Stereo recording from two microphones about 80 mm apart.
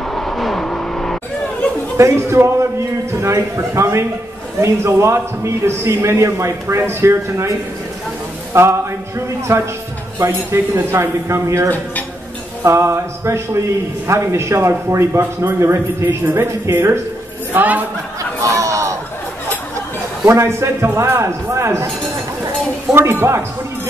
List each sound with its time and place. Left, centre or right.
0.1 s vehicle: centre
2.0 s a man's voice: right
8.5 s a man's voice: right
17.5 s a woman's voice: right
18.4 s chatter: right
20.2 s a man's voice: right
22.9 s speech: centre